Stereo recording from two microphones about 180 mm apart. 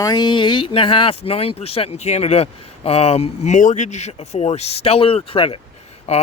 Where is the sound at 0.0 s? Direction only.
25° left (ahead or behind).